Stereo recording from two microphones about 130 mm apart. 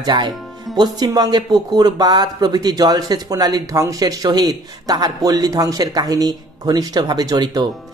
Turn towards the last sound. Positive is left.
turn(degrees=-30)  # may be behind; listen again after turning